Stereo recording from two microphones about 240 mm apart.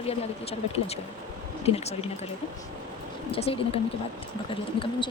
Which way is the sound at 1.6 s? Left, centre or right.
Left.